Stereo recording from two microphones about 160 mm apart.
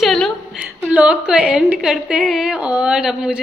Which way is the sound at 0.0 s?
Centre (ahead or behind).